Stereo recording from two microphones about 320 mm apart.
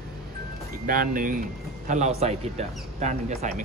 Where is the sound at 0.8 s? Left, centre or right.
Right.